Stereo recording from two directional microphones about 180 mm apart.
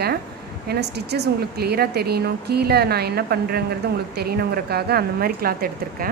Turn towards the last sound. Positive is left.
turn(degrees=-55)  # may be behind; listen again after turning